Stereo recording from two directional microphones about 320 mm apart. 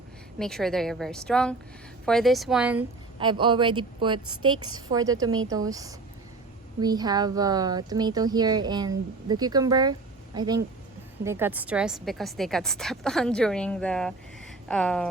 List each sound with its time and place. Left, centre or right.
0.3 s a woman's voice: centre
3.2 s a woman's voice: centre